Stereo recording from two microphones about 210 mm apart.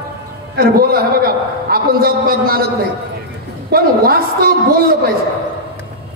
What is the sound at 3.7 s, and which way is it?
Speech, 45° right (ahead or behind).